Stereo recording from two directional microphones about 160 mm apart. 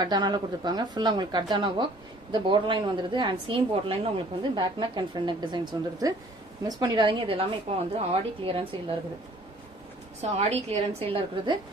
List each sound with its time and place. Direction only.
0.0 s a woman's voice: 25° right (ahead or behind)
10.2 s a woman's voice: 40° right (ahead or behind)